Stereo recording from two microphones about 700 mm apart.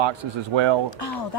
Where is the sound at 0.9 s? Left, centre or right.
Left.